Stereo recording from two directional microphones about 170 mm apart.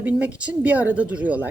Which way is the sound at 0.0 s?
10° right (ahead or behind).